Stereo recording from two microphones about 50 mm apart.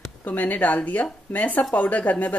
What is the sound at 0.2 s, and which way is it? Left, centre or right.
Speech, left.